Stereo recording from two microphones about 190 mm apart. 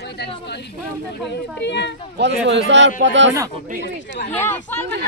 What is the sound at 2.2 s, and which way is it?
A man's voice, 70° right (ahead or behind).